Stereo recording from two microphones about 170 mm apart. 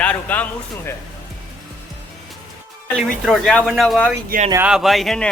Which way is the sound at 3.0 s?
Centre (ahead or behind).